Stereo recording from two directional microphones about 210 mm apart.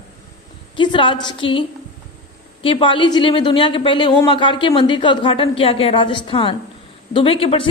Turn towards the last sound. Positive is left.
turn(degrees=25)  # may be behind; listen again after turning